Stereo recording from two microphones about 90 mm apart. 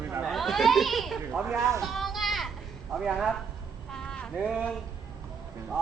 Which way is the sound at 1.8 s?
Centre (ahead or behind).